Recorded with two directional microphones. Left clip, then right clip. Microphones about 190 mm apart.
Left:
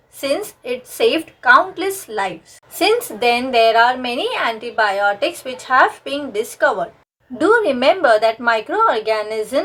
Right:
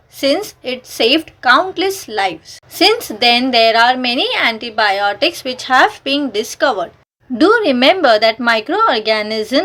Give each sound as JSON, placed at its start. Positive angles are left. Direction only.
{"t": 0.2, "sound": "a woman's voice", "side_deg": -40}